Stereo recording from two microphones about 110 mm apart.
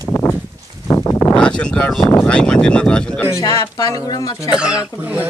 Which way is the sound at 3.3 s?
30° left (ahead or behind).